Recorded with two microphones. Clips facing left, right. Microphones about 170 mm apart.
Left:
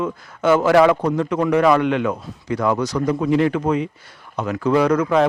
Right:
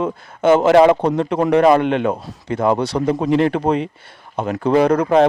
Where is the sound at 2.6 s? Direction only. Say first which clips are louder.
Right 3 dB; 25° right (ahead or behind).